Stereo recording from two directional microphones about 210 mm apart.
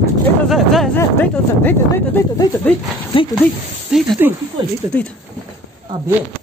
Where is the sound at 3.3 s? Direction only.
Centre (ahead or behind).